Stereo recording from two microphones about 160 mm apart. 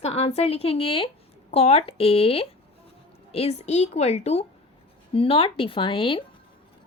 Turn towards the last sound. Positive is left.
turn(degrees=30)  # may be behind; listen again after turning